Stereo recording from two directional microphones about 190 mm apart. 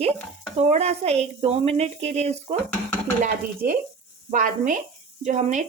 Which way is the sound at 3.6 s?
50° right (ahead or behind).